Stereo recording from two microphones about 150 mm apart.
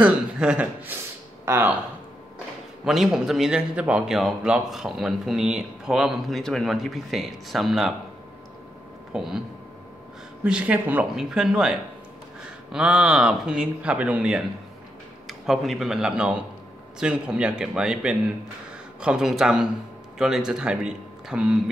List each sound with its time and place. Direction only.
0.0 s speech: 5° right (ahead or behind)
2.8 s a man's voice: 5° right (ahead or behind)
9.1 s a man's voice: 5° right (ahead or behind)
10.4 s a man's voice: 5° right (ahead or behind)
12.7 s a man's voice: 5° right (ahead or behind)